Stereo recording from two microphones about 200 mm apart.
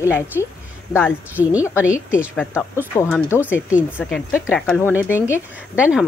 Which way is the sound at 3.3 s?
10° left (ahead or behind).